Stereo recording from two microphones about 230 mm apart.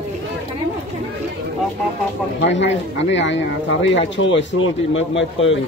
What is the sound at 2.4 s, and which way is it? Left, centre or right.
A man's voice, left.